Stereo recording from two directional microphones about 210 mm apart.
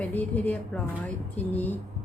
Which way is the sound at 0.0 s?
5° left (ahead or behind).